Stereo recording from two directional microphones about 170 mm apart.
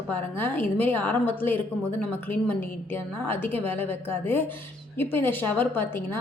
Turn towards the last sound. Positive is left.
turn(degrees=15)  # may be behind; listen again after turning